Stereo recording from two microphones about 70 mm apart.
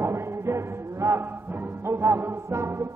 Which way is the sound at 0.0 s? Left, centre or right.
Right.